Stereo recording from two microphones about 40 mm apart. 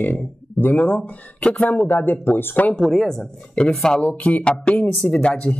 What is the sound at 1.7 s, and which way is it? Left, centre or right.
Speech, left.